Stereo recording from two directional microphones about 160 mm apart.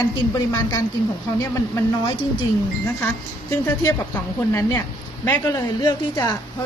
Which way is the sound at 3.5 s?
20° left (ahead or behind).